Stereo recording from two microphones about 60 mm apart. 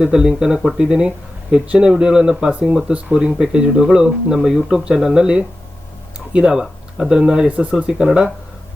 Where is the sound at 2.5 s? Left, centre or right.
Right.